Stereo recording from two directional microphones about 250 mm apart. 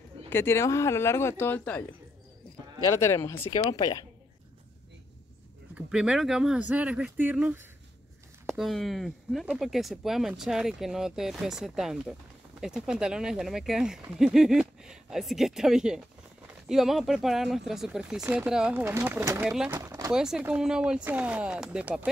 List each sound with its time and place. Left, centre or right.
0.3 s speech: centre
5.8 s speech: centre